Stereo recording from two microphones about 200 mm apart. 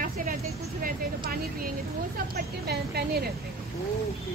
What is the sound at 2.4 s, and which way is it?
Speech, 50° right (ahead or behind).